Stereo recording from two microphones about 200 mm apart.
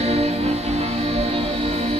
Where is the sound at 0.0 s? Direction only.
30° right (ahead or behind).